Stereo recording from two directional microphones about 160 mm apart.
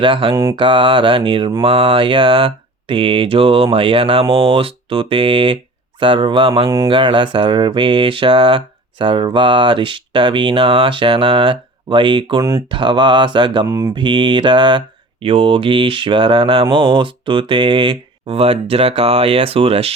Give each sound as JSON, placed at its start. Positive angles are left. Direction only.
{"t": 0.0, "sound": "mantra", "side_deg": -30}
{"t": 13.7, "sound": "mantra", "side_deg": -20}
{"t": 13.9, "sound": "mantra", "side_deg": -30}